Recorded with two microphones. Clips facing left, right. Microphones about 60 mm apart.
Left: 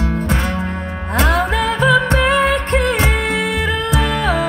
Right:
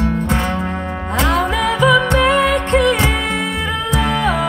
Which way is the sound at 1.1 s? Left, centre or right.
Left.